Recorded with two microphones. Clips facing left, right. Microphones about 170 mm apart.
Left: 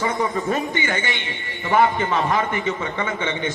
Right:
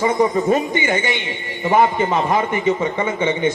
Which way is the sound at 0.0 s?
15° right (ahead or behind).